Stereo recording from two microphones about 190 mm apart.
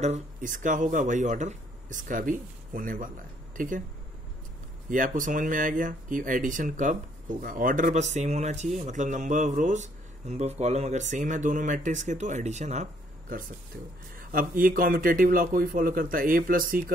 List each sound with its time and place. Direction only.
0.0 s speech: 40° right (ahead or behind)
4.8 s speech: 45° right (ahead or behind)
14.1 s speech: 45° right (ahead or behind)